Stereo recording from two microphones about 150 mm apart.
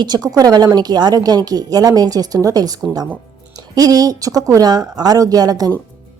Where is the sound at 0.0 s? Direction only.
25° right (ahead or behind).